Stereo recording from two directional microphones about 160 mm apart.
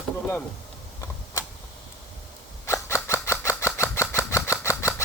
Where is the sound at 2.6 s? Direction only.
15° left (ahead or behind).